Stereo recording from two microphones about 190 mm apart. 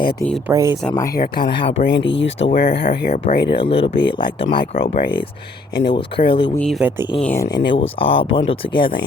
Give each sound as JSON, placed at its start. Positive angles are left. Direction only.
{"t": 0.4, "sound": "speech", "side_deg": -15}
{"t": 0.9, "sound": "speech", "side_deg": 15}
{"t": 1.1, "sound": "speech", "side_deg": 55}
{"t": 2.5, "sound": "speech", "side_deg": 50}
{"t": 3.6, "sound": "speech", "side_deg": 30}
{"t": 4.7, "sound": "speech", "side_deg": 50}
{"t": 5.9, "sound": "speech", "side_deg": 25}
{"t": 6.6, "sound": "speech", "side_deg": 0}
{"t": 7.4, "sound": "speech", "side_deg": 65}
{"t": 7.7, "sound": "speech", "side_deg": 30}